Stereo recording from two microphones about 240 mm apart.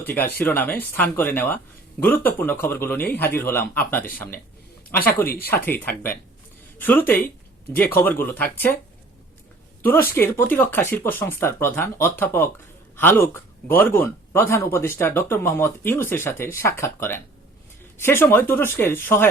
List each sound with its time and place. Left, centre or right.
0.0 s speech: centre
5.2 s speech: left
5.5 s speech: centre
10.1 s speech: centre